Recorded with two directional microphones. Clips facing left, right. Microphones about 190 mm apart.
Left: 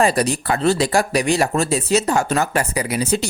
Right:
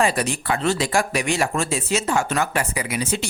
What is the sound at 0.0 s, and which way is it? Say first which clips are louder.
Speech: left 4 dB; 35° left (ahead or behind).